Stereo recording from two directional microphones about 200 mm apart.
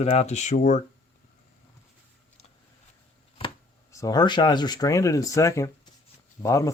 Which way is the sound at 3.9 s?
15° left (ahead or behind).